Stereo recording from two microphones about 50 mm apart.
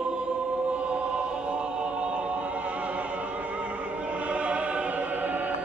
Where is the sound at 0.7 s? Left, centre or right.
Right.